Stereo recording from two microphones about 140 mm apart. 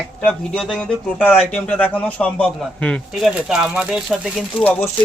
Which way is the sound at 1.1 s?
15° left (ahead or behind).